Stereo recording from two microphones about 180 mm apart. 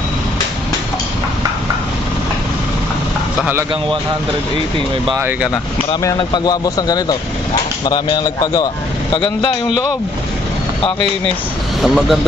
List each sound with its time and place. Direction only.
5.1 s speech: 10° right (ahead or behind)
5.5 s speech: 20° left (ahead or behind)
11.8 s speech: centre (ahead or behind)